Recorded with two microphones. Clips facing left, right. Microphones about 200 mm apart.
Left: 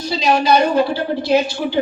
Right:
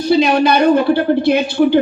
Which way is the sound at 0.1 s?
60° right (ahead or behind).